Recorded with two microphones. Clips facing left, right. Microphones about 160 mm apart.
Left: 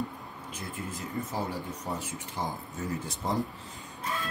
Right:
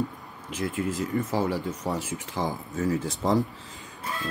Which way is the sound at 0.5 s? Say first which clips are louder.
Right 11 dB; 90° right.